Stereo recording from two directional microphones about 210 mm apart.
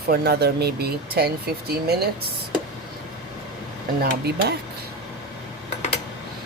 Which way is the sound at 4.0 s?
50° right (ahead or behind).